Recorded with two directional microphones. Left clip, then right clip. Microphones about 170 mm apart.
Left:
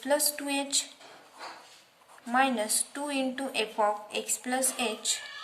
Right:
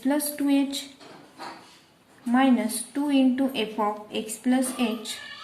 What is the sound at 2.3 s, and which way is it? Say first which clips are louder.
A woman's voice: right 3 dB; 25° left (ahead or behind).